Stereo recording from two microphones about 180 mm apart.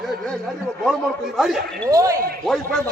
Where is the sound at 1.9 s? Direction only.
15° right (ahead or behind).